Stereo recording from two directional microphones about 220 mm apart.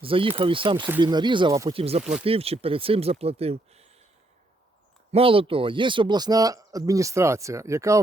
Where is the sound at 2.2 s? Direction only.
25° right (ahead or behind).